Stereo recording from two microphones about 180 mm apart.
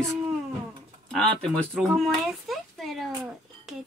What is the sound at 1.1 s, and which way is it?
Speech, 5° left (ahead or behind).